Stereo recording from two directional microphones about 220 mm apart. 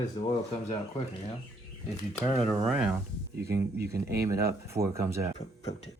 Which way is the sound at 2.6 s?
5° right (ahead or behind).